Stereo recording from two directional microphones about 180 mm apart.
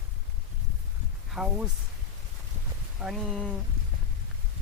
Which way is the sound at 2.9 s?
5° right (ahead or behind).